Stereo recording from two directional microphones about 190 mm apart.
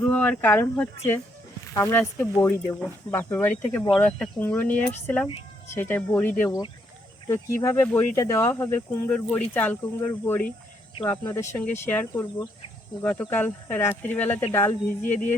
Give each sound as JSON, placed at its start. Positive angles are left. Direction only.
{"t": 0.0, "sound": "speech", "side_deg": 10}
{"t": 10.9, "sound": "speech", "side_deg": 20}